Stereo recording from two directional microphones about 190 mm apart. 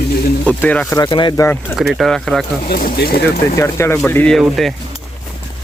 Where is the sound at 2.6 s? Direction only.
50° left (ahead or behind).